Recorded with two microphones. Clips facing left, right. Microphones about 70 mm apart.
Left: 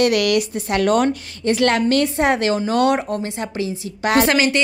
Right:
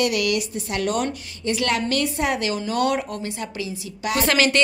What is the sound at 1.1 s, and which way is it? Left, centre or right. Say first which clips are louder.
Speech: left 6 dB; left.